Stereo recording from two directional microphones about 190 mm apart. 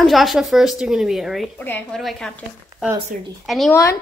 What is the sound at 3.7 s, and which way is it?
Speech, 15° left (ahead or behind).